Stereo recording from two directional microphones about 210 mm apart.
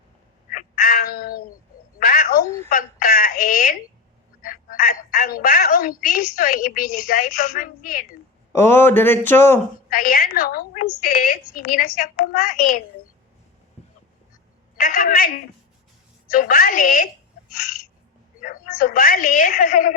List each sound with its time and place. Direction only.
0.5 s meow: 45° left (ahead or behind)
2.0 s telephone: 45° left (ahead or behind)
4.4 s a woman's voice: 40° left (ahead or behind)
8.5 s speech: 10° left (ahead or behind)
9.9 s a woman's voice: 40° left (ahead or behind)
14.8 s a woman's voice: 45° left (ahead or behind)
16.3 s a woman's voice: 45° left (ahead or behind)
18.3 s a woman's voice: 40° left (ahead or behind)